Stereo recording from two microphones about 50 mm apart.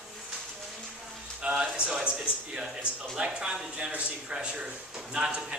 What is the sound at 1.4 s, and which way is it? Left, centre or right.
A man's voice, centre.